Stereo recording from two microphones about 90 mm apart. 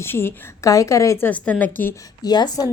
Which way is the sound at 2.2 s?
50° left (ahead or behind).